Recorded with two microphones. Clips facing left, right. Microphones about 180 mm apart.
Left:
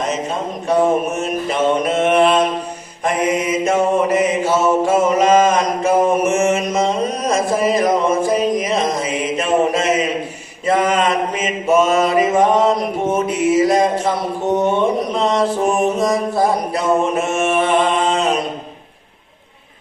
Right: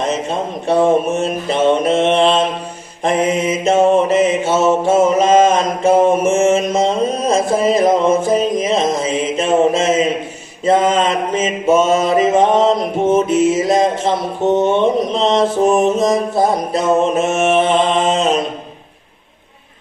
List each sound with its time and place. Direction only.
0.7 s mantra: 25° right (ahead or behind)